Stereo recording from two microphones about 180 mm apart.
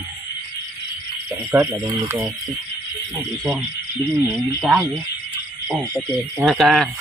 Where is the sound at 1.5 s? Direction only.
15° right (ahead or behind).